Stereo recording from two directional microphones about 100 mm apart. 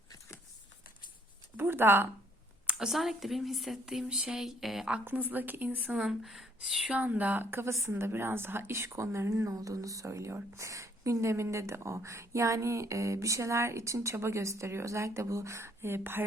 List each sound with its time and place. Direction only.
1.5 s a woman's voice: 20° right (ahead or behind)
2.6 s a woman's voice: 5° right (ahead or behind)
5.0 s speech: 15° right (ahead or behind)
7.0 s a woman's voice: 15° right (ahead or behind)